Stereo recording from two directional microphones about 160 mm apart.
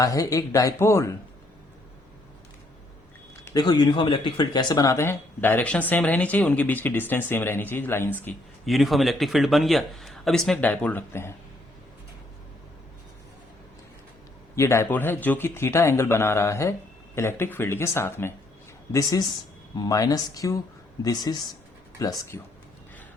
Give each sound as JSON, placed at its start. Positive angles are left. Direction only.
{"t": 0.0, "sound": "speech", "side_deg": 20}
{"t": 3.5, "sound": "speech", "side_deg": 25}
{"t": 8.6, "sound": "speech", "side_deg": 0}
{"t": 14.5, "sound": "speech", "side_deg": 15}